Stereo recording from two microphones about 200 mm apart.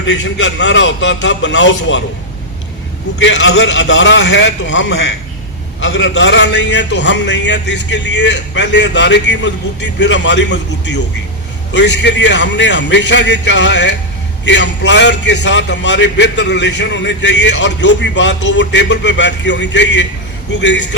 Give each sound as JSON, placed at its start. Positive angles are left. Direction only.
{"t": 0.0, "sound": "a man's voice", "side_deg": 65}
{"t": 3.2, "sound": "a man's voice", "side_deg": 65}